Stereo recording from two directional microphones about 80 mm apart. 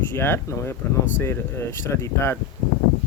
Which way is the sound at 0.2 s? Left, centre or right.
Left.